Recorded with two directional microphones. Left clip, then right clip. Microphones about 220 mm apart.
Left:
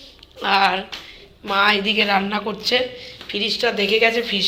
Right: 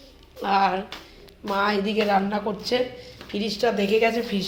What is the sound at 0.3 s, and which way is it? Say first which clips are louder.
A man's voice: left 4 dB; 5° right (ahead or behind).